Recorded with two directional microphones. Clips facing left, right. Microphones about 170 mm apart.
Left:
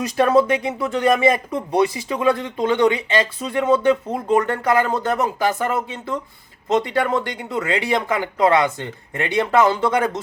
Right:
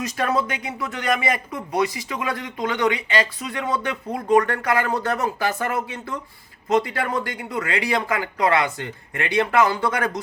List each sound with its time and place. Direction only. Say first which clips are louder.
0.0 s speech: left 7 dB; 30° left (ahead or behind)